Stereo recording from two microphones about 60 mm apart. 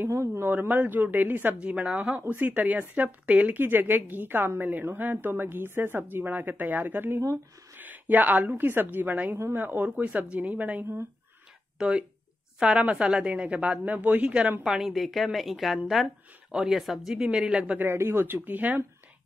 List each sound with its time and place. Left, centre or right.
0.0 s speech: right
0.5 s speech: right
1.6 s a woman's voice: right
11.8 s speech: centre
14.6 s a woman's voice: centre
17.7 s speech: right